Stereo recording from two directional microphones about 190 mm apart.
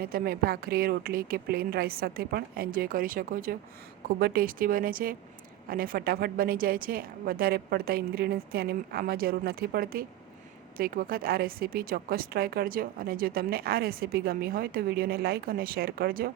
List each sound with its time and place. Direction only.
0.0 s a woman's voice: 50° right (ahead or behind)